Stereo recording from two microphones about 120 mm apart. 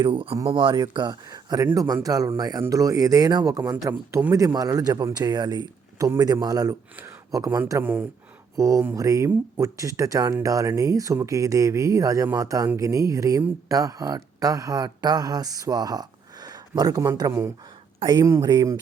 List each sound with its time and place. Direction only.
0.0 s a man's voice: 45° right (ahead or behind); by 7.6 s 30° right (ahead or behind)
7.7 s speech: 20° right (ahead or behind)
18.0 s a man's voice: 40° right (ahead or behind)